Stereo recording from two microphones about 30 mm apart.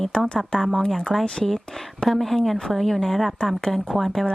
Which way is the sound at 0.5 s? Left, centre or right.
Left.